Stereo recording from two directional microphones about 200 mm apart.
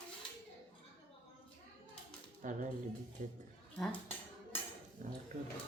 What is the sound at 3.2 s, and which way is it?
Speech, 40° right (ahead or behind).